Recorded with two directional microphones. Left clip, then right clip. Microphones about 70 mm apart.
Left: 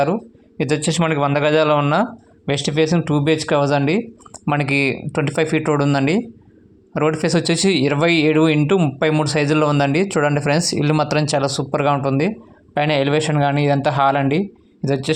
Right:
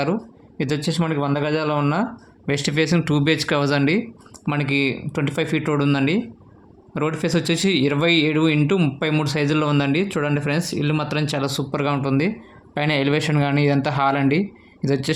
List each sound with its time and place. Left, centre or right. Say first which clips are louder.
0.6 s a man's voice: left 5 dB; left
2.5 s speech: left 3 dB; centre
4.4 s speech: left 3 dB; left
5.1 s speech: left 4 dB; left
9.9 s speech: left 4 dB; left
11.3 s speech: left 5 dB; left
12.7 s speech: left 4 dB; centre